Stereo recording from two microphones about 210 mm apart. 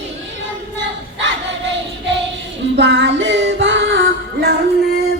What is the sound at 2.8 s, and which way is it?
Music, 60° right (ahead or behind).